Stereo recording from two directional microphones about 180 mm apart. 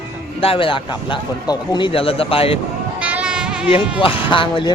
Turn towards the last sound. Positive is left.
turn(degrees=25)  # may be behind; listen again after turning